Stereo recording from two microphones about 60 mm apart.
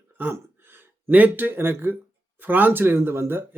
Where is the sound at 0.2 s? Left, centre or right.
Right.